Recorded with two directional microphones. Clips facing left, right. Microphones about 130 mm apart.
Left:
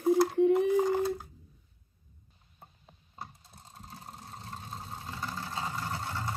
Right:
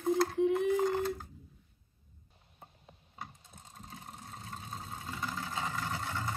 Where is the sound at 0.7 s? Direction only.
20° left (ahead or behind).